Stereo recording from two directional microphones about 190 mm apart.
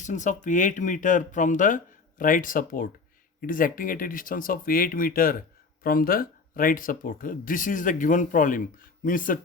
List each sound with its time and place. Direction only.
0.0 s speech: 40° left (ahead or behind)